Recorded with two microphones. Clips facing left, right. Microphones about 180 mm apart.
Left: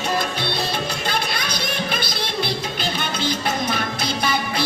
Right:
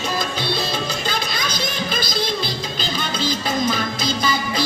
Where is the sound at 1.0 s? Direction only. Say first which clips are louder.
Even; 60° left (ahead or behind).